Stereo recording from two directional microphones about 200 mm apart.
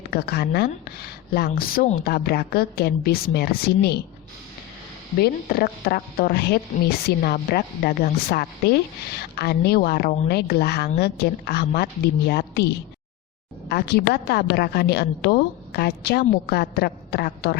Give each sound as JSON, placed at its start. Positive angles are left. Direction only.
{"t": 0.1, "sound": "a woman's voice", "side_deg": 55}
{"t": 5.2, "sound": "a woman's voice", "side_deg": 50}